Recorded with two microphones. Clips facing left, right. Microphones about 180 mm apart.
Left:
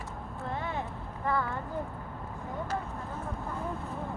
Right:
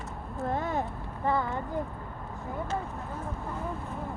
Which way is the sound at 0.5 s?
45° right (ahead or behind).